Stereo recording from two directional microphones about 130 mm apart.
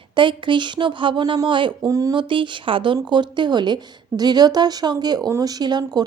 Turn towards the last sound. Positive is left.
turn(degrees=-35)  # may be behind; listen again after turning